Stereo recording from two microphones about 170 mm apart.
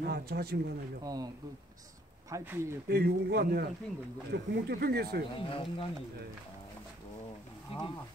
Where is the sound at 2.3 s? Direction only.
15° right (ahead or behind).